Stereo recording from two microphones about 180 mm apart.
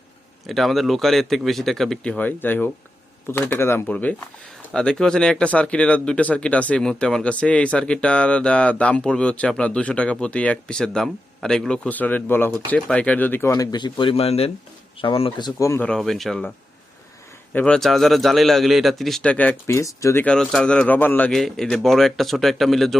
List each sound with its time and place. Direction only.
0.4 s a man's voice: centre (ahead or behind); by 15.9 s 15° left (ahead or behind)
15.9 s a man's voice: centre (ahead or behind)
17.5 s a man's voice: 5° left (ahead or behind)
20.2 s a man's voice: 5° left (ahead or behind)